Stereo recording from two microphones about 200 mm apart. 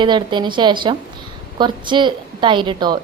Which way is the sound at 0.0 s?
25° right (ahead or behind).